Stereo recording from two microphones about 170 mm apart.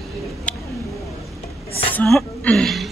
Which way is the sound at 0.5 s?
5° left (ahead or behind).